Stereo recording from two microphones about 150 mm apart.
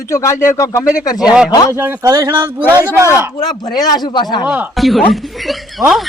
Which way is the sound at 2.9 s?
15° right (ahead or behind).